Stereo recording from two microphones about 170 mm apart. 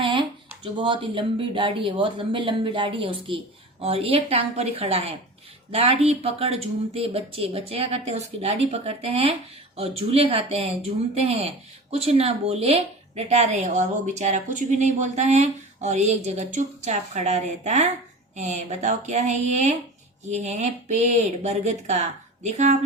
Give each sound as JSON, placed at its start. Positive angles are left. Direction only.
{"t": 0.0, "sound": "speech", "side_deg": -30}